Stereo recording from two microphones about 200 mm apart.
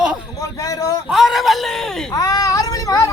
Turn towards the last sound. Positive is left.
turn(degrees=15)  # may be behind; listen again after turning